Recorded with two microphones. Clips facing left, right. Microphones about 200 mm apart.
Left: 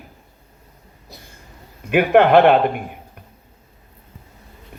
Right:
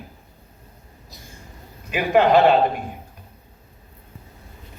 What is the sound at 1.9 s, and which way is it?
Speech, 60° left (ahead or behind).